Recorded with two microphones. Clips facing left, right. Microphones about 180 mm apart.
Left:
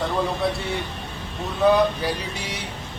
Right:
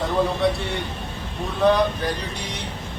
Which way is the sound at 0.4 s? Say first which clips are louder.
Right 4 dB; centre (ahead or behind).